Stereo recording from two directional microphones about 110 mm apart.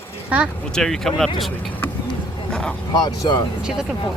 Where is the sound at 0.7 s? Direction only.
5° left (ahead or behind).